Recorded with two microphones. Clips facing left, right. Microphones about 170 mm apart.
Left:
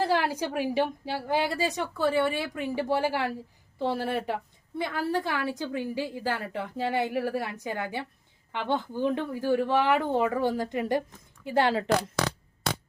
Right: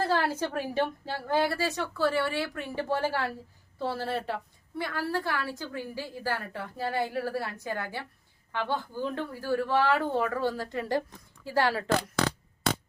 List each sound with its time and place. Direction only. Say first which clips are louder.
0.0 s a woman's voice: left 1 dB; 15° left (ahead or behind)